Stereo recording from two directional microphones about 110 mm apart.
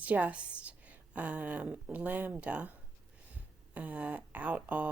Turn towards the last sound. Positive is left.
turn(degrees=-15)  # may be behind; listen again after turning